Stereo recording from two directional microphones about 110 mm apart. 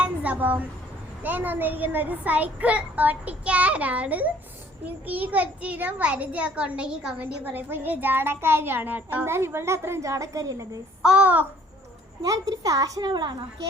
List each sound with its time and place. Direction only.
0.0 s a sound: 15° right (ahead or behind)
1.2 s a child's voice: 15° right (ahead or behind)
11.0 s a child's voice: 10° right (ahead or behind)
12.2 s a woman's voice: 30° right (ahead or behind)